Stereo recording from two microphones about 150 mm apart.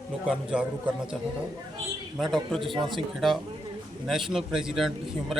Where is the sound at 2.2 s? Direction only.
Centre (ahead or behind).